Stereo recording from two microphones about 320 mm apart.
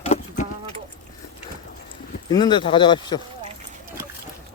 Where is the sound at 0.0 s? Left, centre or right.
Centre.